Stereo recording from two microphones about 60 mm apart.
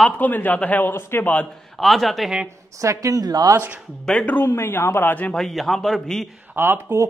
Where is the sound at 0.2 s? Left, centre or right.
Left.